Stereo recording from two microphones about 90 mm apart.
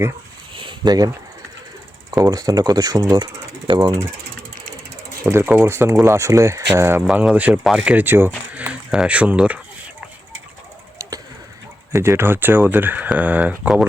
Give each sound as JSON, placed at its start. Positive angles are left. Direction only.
{"t": 0.5, "sound": "a sound", "side_deg": -65}
{"t": 2.3, "sound": "speech", "side_deg": -45}
{"t": 3.7, "sound": "speech", "side_deg": -60}
{"t": 5.3, "sound": "speech", "side_deg": -20}
{"t": 7.1, "sound": "speech", "side_deg": -10}
{"t": 7.9, "sound": "speech", "side_deg": -25}
{"t": 8.5, "sound": "speech", "side_deg": -10}
{"t": 11.9, "sound": "speech", "side_deg": -30}